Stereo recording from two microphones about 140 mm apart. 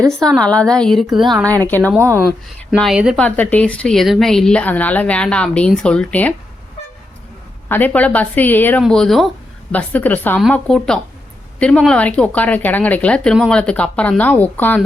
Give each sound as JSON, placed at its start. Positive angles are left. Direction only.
{"t": 0.1, "sound": "a woman's voice", "side_deg": 5}
{"t": 1.5, "sound": "speech", "side_deg": 10}
{"t": 2.0, "sound": "speech", "side_deg": -20}
{"t": 2.6, "sound": "a woman's voice", "side_deg": 0}
{"t": 3.2, "sound": "speech", "side_deg": 10}
{"t": 7.7, "sound": "speech", "side_deg": 10}
{"t": 8.8, "sound": "a woman's voice", "side_deg": 5}
{"t": 9.7, "sound": "a woman's voice", "side_deg": 10}